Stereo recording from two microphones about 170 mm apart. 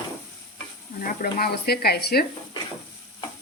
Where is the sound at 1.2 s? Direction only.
60° left (ahead or behind).